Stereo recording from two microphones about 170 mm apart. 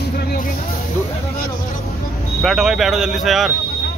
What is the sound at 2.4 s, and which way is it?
Speech, centre (ahead or behind).